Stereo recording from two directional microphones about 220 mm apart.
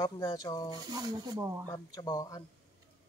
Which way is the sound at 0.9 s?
15° right (ahead or behind).